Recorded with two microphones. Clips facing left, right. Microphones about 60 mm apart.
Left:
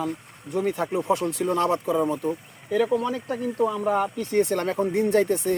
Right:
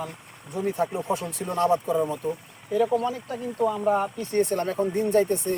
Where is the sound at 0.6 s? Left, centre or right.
Left.